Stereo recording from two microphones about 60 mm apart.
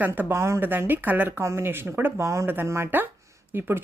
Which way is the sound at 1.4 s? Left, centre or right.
Right.